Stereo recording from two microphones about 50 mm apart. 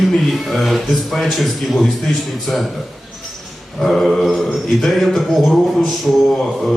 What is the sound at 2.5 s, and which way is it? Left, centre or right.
Speech, centre.